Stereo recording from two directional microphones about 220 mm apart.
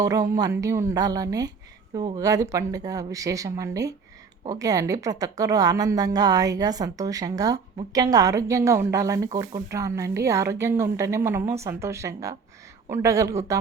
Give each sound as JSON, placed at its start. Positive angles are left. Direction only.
{"t": 0.0, "sound": "a woman's voice", "side_deg": -15}